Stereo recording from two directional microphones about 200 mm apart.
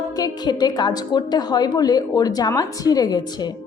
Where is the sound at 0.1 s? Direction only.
20° left (ahead or behind).